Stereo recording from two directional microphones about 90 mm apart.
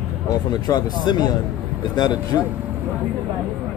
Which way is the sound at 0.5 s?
50° left (ahead or behind).